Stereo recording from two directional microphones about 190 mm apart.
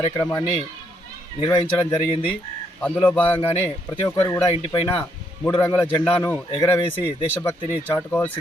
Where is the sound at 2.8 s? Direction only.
5° left (ahead or behind).